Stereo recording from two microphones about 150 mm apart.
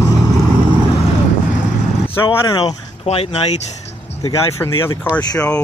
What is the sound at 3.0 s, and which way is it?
Speech, 40° left (ahead or behind).